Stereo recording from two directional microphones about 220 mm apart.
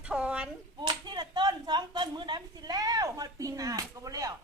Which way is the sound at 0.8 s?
20° right (ahead or behind).